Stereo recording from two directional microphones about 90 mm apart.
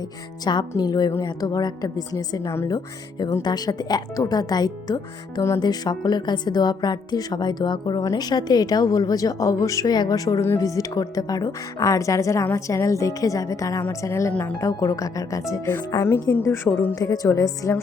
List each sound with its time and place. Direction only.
0.5 s speech: 50° left (ahead or behind); by 16.6 s 30° left (ahead or behind)
16.9 s speech: 45° left (ahead or behind)